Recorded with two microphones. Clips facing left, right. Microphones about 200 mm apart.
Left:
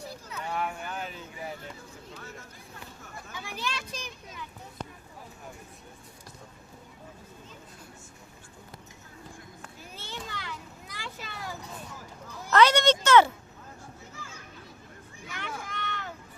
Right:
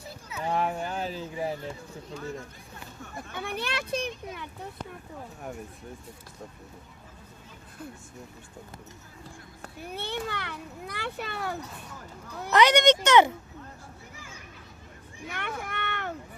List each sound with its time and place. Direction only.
0.4 s a sound: 30° right (ahead or behind)
3.3 s a child's voice: 60° right (ahead or behind)
9.8 s a child's voice: 60° right (ahead or behind)
12.5 s speech: 15° right (ahead or behind)
15.3 s vehicle: 60° right (ahead or behind)